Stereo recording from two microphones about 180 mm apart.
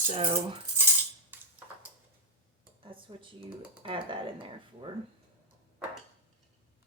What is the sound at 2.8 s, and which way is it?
Speech, 30° right (ahead or behind).